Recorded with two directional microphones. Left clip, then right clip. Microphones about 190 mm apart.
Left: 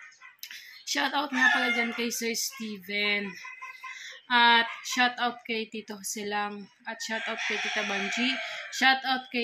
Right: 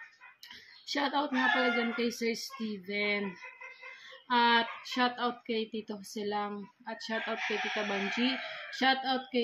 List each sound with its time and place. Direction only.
0.8 s speech: 5° right (ahead or behind)
4.3 s speech: centre (ahead or behind)